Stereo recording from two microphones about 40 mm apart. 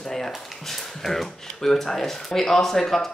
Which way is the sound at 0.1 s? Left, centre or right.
Centre.